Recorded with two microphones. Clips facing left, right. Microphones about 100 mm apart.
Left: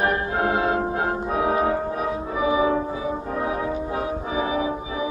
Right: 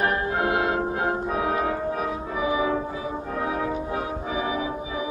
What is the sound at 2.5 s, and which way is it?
Music, 25° left (ahead or behind).